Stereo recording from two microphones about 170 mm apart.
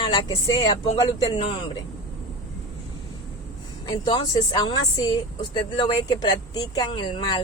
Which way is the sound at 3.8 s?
25° left (ahead or behind).